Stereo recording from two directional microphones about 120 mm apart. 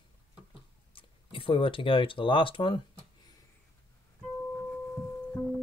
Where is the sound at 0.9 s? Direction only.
45° left (ahead or behind).